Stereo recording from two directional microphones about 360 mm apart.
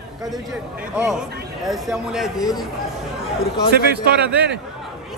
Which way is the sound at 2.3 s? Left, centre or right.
Centre.